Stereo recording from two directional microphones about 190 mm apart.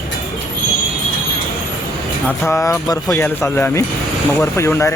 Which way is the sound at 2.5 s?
15° left (ahead or behind).